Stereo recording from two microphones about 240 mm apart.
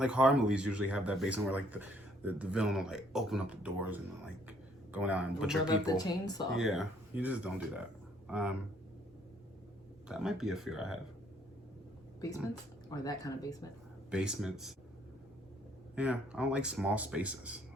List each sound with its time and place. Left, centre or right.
0.0 s speech: centre
4.4 s a sound: centre
5.6 s speech: centre
6.5 s speech: centre
10.1 s speech: centre
12.9 s speech: centre
14.1 s speech: centre
16.0 s speech: centre